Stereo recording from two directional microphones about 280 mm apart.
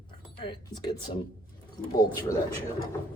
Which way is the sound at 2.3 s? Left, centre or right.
Centre.